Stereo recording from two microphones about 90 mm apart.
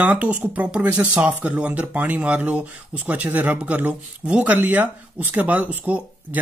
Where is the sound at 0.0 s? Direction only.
15° right (ahead or behind).